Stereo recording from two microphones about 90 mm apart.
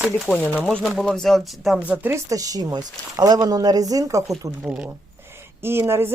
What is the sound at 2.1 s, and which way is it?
Speech, 40° right (ahead or behind).